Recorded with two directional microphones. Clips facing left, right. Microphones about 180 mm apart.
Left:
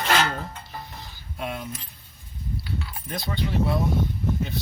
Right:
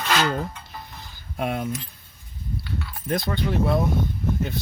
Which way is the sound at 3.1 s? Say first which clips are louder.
Right 6 dB; 50° right (ahead or behind).